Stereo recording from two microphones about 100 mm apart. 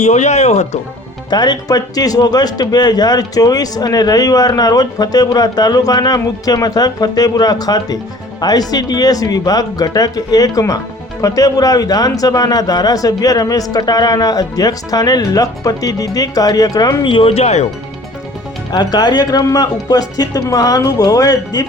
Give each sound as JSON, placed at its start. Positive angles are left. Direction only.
{"t": 0.4, "sound": "speech", "side_deg": 90}
{"t": 1.3, "sound": "a man's voice", "side_deg": 45}
{"t": 17.1, "sound": "speech", "side_deg": 65}
{"t": 18.7, "sound": "a man's voice", "side_deg": 45}